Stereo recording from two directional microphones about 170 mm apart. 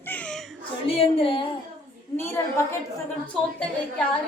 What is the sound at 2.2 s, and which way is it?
Speech, 15° left (ahead or behind).